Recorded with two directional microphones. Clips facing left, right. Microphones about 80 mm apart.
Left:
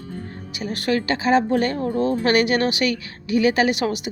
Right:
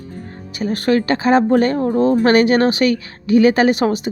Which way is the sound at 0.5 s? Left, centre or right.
Right.